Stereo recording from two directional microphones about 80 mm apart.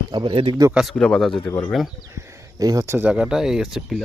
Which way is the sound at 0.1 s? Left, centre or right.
Right.